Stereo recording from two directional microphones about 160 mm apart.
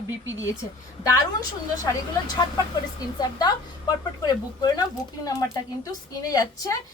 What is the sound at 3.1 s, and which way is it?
A woman's voice, 25° left (ahead or behind).